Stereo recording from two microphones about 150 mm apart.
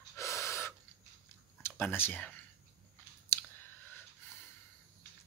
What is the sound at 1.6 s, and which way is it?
Speech, 15° left (ahead or behind).